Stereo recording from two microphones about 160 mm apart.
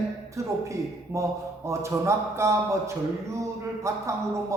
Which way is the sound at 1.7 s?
20° right (ahead or behind).